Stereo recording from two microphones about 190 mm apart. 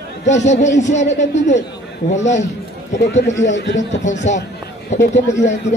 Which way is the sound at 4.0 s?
40° left (ahead or behind).